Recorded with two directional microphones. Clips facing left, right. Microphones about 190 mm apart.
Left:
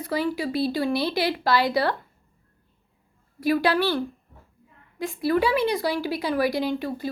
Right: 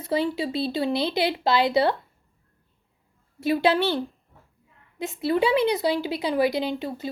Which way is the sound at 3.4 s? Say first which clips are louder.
Even; 25° right (ahead or behind).